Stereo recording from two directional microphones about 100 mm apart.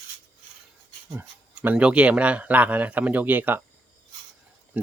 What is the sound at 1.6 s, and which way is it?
A man's voice, 10° right (ahead or behind).